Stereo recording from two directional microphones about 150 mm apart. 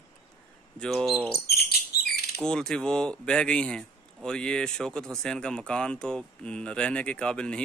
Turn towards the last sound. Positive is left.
turn(degrees=5)  # may be behind; listen again after turning